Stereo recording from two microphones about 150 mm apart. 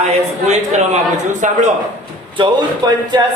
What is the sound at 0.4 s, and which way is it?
A man's voice, 50° right (ahead or behind).